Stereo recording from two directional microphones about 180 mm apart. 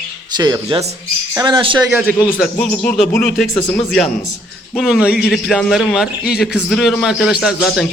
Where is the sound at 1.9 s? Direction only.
5° right (ahead or behind).